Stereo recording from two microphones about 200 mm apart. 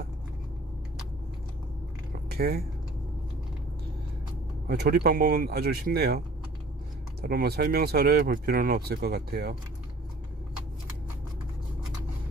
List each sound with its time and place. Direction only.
2.2 s speech: 50° right (ahead or behind)
4.6 s speech: 55° right (ahead or behind)